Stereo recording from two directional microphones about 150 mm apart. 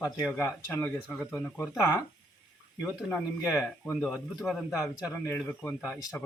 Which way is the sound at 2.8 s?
5° right (ahead or behind).